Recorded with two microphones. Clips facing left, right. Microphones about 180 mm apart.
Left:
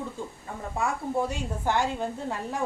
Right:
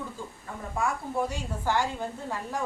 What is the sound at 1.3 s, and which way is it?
A woman's voice, 20° left (ahead or behind).